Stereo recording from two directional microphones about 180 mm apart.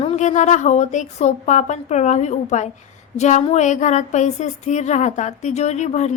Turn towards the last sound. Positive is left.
turn(degrees=40)  # may be behind; listen again after turning